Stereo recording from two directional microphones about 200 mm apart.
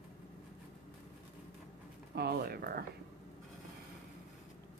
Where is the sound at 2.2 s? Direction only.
50° right (ahead or behind).